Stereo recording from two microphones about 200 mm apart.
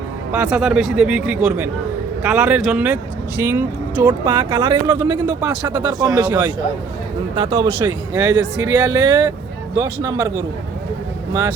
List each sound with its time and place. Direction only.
0.3 s speech: 5° right (ahead or behind)
4.4 s speech: 20° right (ahead or behind)